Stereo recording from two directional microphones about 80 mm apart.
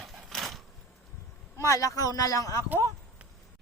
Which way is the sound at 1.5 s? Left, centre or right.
Left.